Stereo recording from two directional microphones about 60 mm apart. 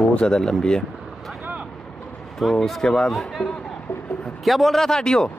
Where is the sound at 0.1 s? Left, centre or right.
Centre.